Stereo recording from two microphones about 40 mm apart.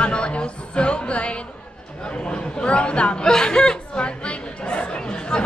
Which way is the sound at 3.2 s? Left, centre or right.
Centre.